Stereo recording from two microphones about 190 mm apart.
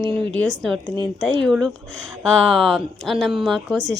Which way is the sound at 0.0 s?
5° left (ahead or behind).